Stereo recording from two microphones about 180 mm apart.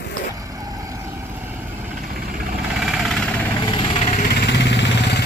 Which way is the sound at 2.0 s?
55° right (ahead or behind).